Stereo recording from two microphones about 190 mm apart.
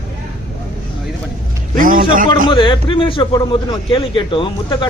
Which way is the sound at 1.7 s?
45° right (ahead or behind).